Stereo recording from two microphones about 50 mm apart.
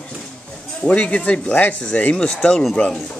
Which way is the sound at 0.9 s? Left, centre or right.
Left.